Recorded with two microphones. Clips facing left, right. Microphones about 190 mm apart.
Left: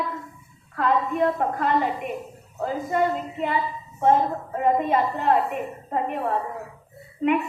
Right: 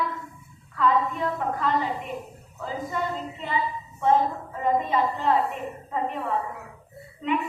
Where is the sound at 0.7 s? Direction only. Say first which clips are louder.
Left 1 dB; 55° left (ahead or behind).